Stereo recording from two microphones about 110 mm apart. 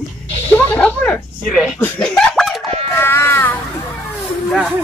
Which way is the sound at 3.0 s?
20° left (ahead or behind).